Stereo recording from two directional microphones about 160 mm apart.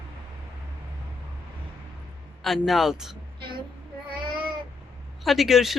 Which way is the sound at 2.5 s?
Centre (ahead or behind).